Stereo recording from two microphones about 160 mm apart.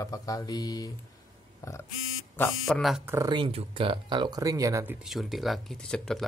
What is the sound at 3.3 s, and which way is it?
Speech, 35° right (ahead or behind).